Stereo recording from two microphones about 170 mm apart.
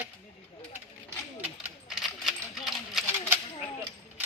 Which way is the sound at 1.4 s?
5° right (ahead or behind).